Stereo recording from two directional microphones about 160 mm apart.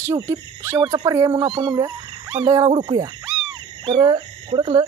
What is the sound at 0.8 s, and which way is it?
Speech, 35° right (ahead or behind).